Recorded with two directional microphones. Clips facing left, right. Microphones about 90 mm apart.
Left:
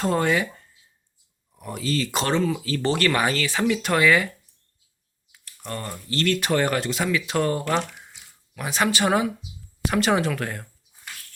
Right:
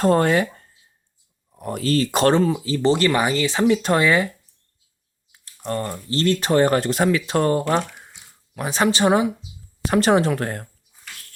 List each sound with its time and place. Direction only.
0.0 s speech: 45° right (ahead or behind)
2.5 s speech: 20° right (ahead or behind)
5.3 s speech: 30° right (ahead or behind)